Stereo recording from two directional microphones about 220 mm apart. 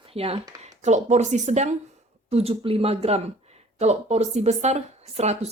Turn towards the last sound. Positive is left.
turn(degrees=-30)  # may be behind; listen again after turning